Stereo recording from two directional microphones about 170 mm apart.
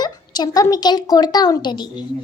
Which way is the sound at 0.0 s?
25° left (ahead or behind).